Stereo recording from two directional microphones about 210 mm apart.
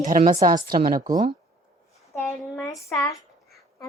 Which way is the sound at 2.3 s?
Centre (ahead or behind).